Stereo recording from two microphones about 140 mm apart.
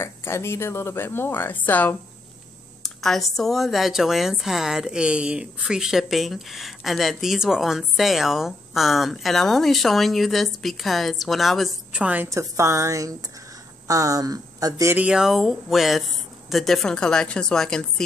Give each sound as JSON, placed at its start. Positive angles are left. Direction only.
{"t": 0.0, "sound": "speech", "side_deg": 20}
{"t": 12.3, "sound": "speech", "side_deg": -20}
{"t": 15.0, "sound": "speech", "side_deg": -5}